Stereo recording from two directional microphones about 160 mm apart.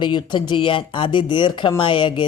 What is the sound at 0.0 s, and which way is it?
Speech, 30° left (ahead or behind).